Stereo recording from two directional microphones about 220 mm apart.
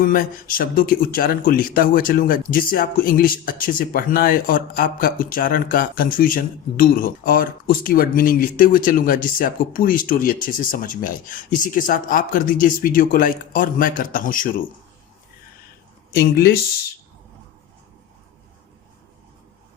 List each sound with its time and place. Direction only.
0.0 s speech: 40° left (ahead or behind)
16.1 s speech: 45° left (ahead or behind)